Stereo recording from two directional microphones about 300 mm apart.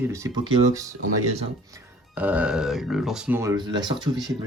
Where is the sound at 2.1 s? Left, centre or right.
Centre.